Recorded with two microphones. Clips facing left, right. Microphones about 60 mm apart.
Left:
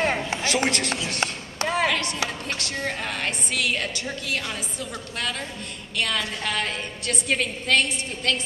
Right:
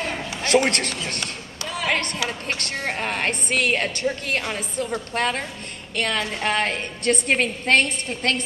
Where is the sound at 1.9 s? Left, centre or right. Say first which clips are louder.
Right 2 dB; right.